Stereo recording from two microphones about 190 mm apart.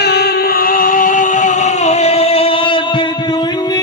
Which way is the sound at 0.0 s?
60° left (ahead or behind).